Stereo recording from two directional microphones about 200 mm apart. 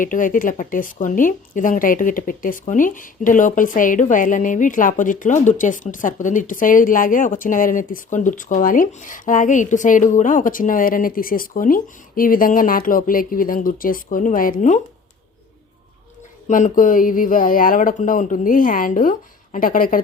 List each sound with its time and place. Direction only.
0.0 s speech: 40° left (ahead or behind)
16.5 s speech: 40° left (ahead or behind)